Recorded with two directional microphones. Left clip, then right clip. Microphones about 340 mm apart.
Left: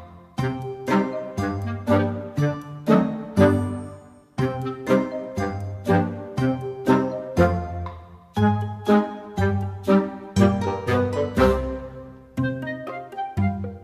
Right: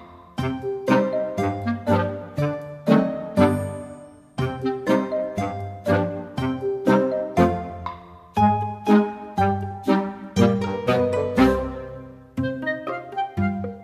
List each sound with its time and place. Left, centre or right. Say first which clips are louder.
0.4 s music: right 2 dB; centre